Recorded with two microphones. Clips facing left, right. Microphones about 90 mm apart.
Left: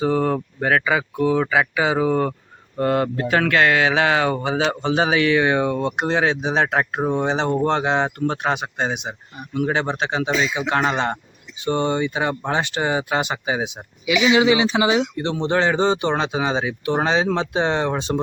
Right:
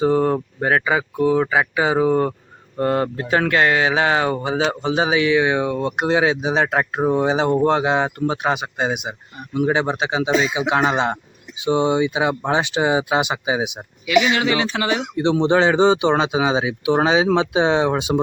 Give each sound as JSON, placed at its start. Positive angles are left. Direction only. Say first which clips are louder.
{"t": 0.0, "sound": "speech", "louder": "right 2 dB", "side_deg": -25}
{"t": 14.3, "sound": "speech", "louder": "left 4 dB", "side_deg": 15}
{"t": 15.1, "sound": "speech", "louder": "right 5 dB", "side_deg": -20}